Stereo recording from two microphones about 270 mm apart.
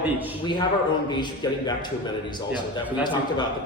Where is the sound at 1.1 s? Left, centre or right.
Centre.